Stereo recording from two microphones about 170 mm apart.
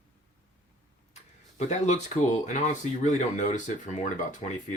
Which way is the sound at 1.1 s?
40° left (ahead or behind).